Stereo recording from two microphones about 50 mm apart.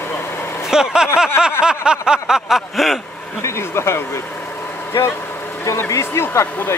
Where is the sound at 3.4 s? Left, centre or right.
Left.